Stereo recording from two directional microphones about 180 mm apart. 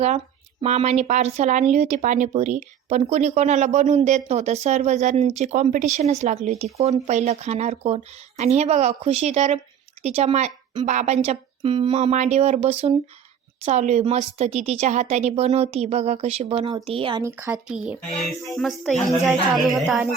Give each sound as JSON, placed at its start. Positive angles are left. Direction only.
{"t": 0.6, "sound": "speech", "side_deg": -35}
{"t": 17.2, "sound": "speech", "side_deg": -10}